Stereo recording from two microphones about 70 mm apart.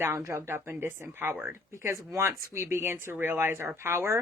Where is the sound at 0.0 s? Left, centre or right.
Right.